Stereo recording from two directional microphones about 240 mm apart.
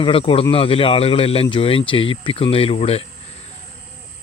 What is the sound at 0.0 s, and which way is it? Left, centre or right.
Speech, left.